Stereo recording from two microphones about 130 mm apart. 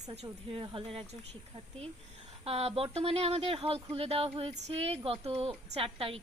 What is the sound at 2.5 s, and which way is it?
Speech, 50° right (ahead or behind).